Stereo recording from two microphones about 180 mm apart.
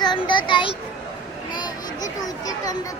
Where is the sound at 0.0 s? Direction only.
25° left (ahead or behind).